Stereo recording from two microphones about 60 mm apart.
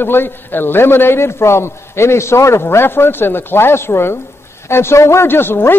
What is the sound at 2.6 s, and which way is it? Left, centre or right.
A man's voice, left.